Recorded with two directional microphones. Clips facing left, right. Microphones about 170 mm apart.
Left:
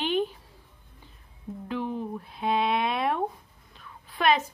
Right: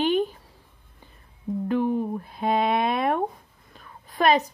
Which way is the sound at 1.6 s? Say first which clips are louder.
Right 7 dB; 50° right (ahead or behind).